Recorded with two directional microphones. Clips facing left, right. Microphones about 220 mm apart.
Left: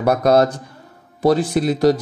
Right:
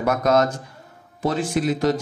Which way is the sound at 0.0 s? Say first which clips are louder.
Left 4 dB; 35° left (ahead or behind).